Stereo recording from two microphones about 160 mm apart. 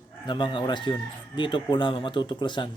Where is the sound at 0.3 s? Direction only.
30° left (ahead or behind).